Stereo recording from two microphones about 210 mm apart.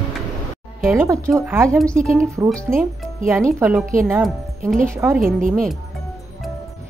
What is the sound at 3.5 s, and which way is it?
Speech, 10° right (ahead or behind).